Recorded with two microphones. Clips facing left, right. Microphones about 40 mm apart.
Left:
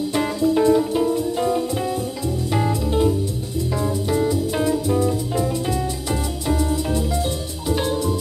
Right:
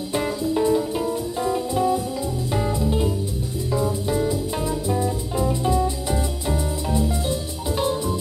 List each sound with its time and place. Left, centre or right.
0.1 s music: left
0.9 s music: left
3.7 s music: left